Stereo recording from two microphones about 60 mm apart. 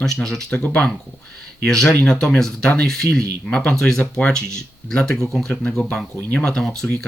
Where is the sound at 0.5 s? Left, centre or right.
Left.